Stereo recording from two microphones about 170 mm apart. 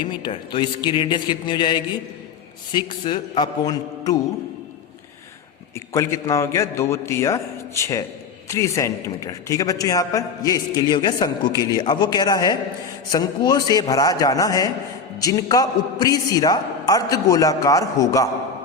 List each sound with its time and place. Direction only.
0.0 s a man's voice: 25° left (ahead or behind)
5.9 s a man's voice: 20° left (ahead or behind)